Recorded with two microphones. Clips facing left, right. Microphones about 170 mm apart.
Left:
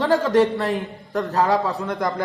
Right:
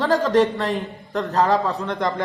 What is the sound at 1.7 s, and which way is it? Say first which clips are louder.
Speech: even; centre (ahead or behind).